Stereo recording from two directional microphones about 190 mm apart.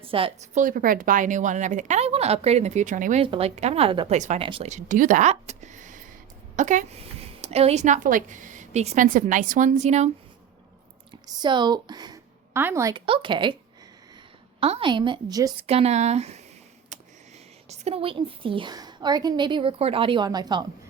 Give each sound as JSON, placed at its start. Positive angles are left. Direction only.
{"t": 0.0, "sound": "a woman's voice", "side_deg": -30}
{"t": 0.6, "sound": "speech", "side_deg": -45}
{"t": 3.2, "sound": "speech", "side_deg": -30}
{"t": 11.3, "sound": "a woman's voice", "side_deg": -25}
{"t": 14.6, "sound": "a woman's voice", "side_deg": -30}
{"t": 15.6, "sound": "speech", "side_deg": -35}
{"t": 17.7, "sound": "a woman's voice", "side_deg": -30}